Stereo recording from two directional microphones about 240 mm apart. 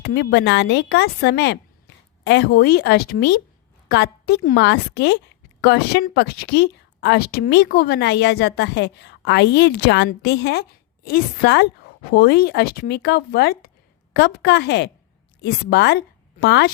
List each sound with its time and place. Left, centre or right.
0.0 s a woman's voice: left